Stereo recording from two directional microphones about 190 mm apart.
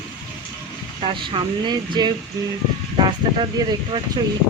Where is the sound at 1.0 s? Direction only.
30° right (ahead or behind).